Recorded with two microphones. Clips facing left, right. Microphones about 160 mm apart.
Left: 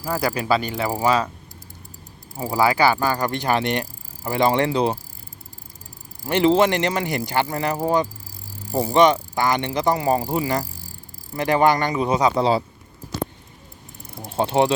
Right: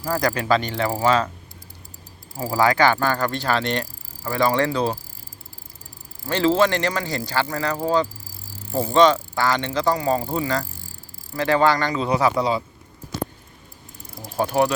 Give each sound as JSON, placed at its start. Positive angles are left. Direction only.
{"t": 0.0, "sound": "pulleys", "side_deg": 15}
{"t": 2.3, "sound": "pulleys", "side_deg": 15}
{"t": 3.2, "sound": "speech", "side_deg": 15}
{"t": 6.2, "sound": "speech", "side_deg": 20}
{"t": 14.2, "sound": "speech", "side_deg": 25}